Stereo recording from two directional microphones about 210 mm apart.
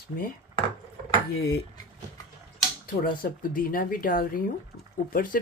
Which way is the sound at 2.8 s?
45° left (ahead or behind).